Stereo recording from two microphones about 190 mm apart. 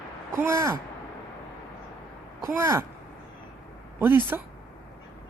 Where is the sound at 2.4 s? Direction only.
15° right (ahead or behind).